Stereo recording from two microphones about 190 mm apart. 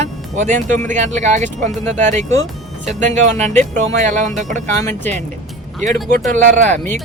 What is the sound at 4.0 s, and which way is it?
Speech, 40° right (ahead or behind).